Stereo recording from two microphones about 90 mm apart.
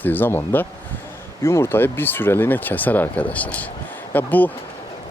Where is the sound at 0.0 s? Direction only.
20° left (ahead or behind).